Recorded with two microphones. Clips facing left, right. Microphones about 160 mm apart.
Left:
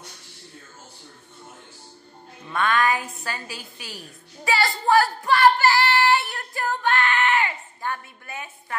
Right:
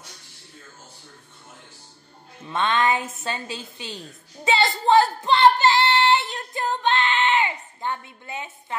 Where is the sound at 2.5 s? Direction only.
25° right (ahead or behind).